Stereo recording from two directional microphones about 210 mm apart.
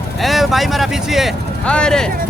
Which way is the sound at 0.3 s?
Centre (ahead or behind).